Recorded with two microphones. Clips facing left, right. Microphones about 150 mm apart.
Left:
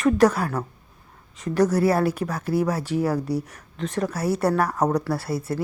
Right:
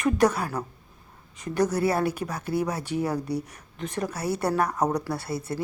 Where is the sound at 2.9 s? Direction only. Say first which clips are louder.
Left 3 dB; 55° left (ahead or behind).